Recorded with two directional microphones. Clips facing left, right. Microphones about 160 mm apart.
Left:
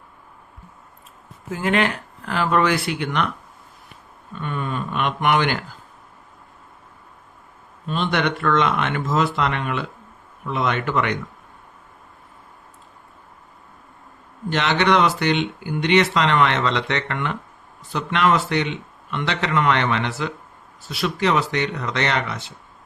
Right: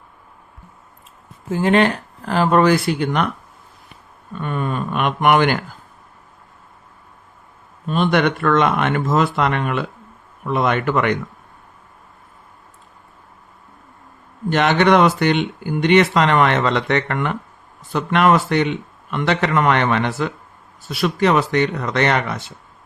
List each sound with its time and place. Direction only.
1.5 s speech: 30° right (ahead or behind)
4.4 s speech: 50° right (ahead or behind)
7.9 s speech: 50° right (ahead or behind)
14.5 s speech: 50° right (ahead or behind)